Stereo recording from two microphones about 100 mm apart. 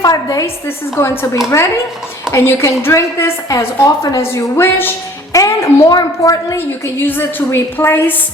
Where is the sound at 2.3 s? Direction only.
30° left (ahead or behind).